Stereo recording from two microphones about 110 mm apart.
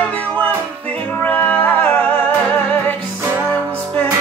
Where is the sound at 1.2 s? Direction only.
15° left (ahead or behind).